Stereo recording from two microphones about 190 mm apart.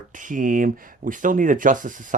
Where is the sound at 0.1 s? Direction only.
45° right (ahead or behind).